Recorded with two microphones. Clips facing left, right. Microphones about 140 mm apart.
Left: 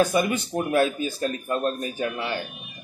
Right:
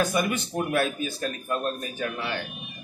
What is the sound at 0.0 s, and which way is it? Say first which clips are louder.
A man's voice: left 4 dB; 30° left (ahead or behind).